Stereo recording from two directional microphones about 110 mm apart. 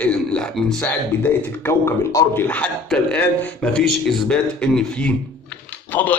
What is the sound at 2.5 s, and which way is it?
Speech, 10° left (ahead or behind).